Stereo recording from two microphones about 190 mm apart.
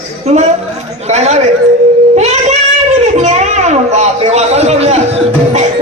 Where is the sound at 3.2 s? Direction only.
35° right (ahead or behind).